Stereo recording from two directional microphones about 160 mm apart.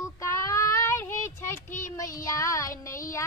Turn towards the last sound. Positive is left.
turn(degrees=20)  # may be behind; listen again after turning